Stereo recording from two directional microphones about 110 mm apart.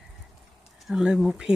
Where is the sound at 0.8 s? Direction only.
5° right (ahead or behind).